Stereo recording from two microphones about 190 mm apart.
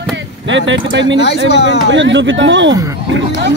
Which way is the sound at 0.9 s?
75° right (ahead or behind).